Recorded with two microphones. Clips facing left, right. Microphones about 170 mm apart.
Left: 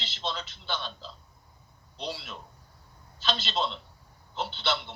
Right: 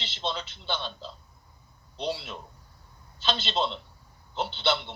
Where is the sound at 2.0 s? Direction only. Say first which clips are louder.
Right 5 dB; centre (ahead or behind).